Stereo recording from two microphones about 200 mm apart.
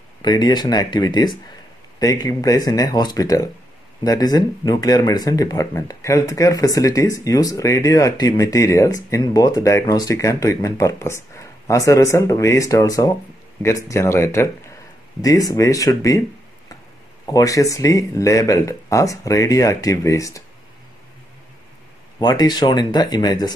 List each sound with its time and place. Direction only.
0.2 s speech: 20° left (ahead or behind)
17.3 s speech: 15° left (ahead or behind)
22.2 s speech: 20° left (ahead or behind)